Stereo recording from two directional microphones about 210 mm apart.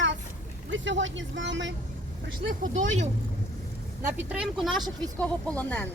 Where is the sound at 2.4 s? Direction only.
40° right (ahead or behind).